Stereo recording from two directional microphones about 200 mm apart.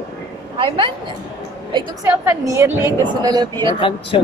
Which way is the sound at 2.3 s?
15° right (ahead or behind).